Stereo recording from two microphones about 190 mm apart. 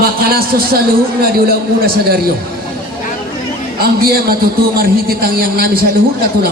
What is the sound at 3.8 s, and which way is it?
A man's voice, 55° right (ahead or behind).